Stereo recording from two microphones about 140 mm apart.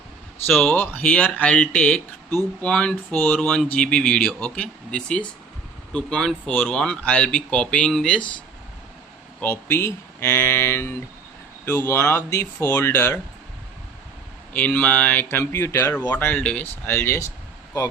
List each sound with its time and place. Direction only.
0.4 s speech: 5° left (ahead or behind)
9.4 s speech: 15° left (ahead or behind)
14.5 s speech: 10° left (ahead or behind)